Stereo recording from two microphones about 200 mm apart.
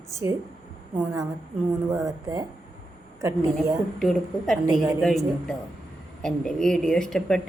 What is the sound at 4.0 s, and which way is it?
A woman's voice, centre (ahead or behind).